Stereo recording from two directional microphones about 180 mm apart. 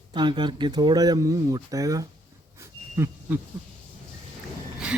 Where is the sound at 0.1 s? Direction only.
25° right (ahead or behind).